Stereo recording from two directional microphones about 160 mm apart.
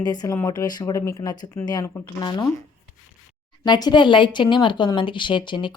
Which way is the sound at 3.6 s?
25° left (ahead or behind).